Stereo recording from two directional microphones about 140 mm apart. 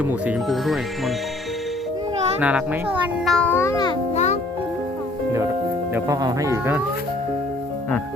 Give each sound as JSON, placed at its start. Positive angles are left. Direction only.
{"t": 0.0, "sound": "speech", "side_deg": -10}
{"t": 0.4, "sound": "speech", "side_deg": 0}
{"t": 2.4, "sound": "speech", "side_deg": -10}
{"t": 3.2, "sound": "speech", "side_deg": 5}
{"t": 3.5, "sound": "a child's voice", "side_deg": 20}
{"t": 4.1, "sound": "music", "side_deg": 55}
{"t": 5.9, "sound": "speech", "side_deg": -25}